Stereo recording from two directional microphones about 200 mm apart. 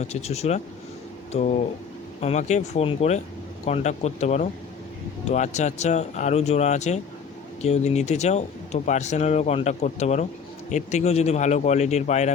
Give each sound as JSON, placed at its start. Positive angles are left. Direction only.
{"t": 0.0, "sound": "speech", "side_deg": 30}